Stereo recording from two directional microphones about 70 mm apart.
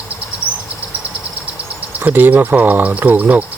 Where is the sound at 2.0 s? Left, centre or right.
Right.